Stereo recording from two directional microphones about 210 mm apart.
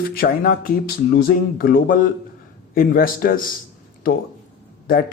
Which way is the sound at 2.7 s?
45° left (ahead or behind).